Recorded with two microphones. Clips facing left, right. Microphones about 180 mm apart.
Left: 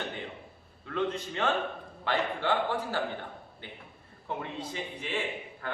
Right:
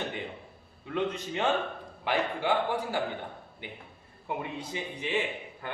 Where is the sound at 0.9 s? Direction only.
15° right (ahead or behind).